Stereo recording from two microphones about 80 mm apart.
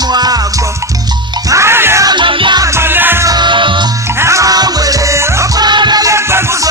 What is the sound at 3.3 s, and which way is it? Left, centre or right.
Music, right.